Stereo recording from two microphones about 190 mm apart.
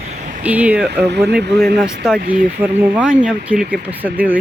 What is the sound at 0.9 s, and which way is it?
Speech, 60° right (ahead or behind).